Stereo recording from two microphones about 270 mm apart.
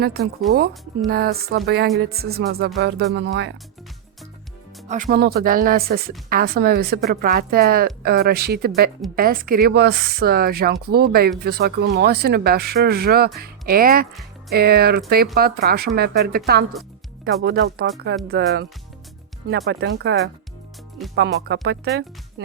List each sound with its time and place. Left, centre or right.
0.0 s a woman's voice: right
0.5 s speech: centre
1.1 s a woman's voice: right
4.9 s a woman's voice: right
17.4 s a woman's voice: right